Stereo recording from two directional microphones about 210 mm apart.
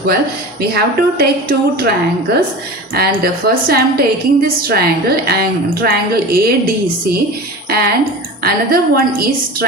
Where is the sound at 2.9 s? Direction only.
45° right (ahead or behind).